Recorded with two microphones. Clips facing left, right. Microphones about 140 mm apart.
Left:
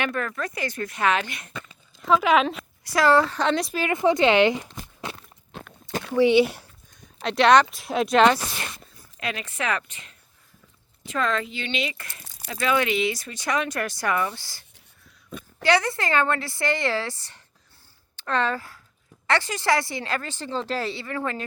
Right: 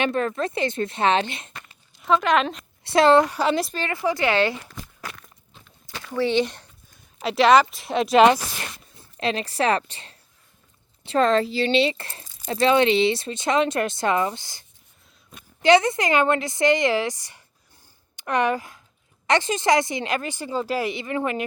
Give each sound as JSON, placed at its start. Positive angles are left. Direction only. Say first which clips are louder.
{"t": 0.0, "sound": "speech", "louder": "right 5 dB", "side_deg": -25}
{"t": 2.0, "sound": "speech", "louder": "left 1 dB", "side_deg": 5}
{"t": 2.8, "sound": "a woman's voice", "louder": "right 3 dB", "side_deg": -25}
{"t": 3.3, "sound": "speech", "louder": "right 1 dB", "side_deg": -5}
{"t": 3.8, "sound": "speech", "louder": "left 4 dB", "side_deg": 20}
{"t": 5.5, "sound": "a sound", "louder": "left 12 dB", "side_deg": 70}
{"t": 6.1, "sound": "speech", "louder": "left 4 dB", "side_deg": 10}
{"t": 7.2, "sound": "speech", "louder": "right 1 dB", "side_deg": -5}
{"t": 9.0, "sound": "speech", "louder": "right 7 dB", "side_deg": -30}
{"t": 15.6, "sound": "speech", "louder": "right 5 dB", "side_deg": -20}